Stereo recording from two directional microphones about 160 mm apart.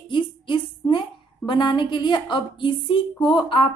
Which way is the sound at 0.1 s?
30° left (ahead or behind).